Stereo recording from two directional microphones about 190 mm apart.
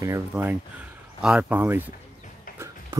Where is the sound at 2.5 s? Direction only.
15° right (ahead or behind).